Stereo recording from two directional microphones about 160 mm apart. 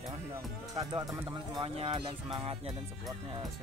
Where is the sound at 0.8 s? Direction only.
35° right (ahead or behind).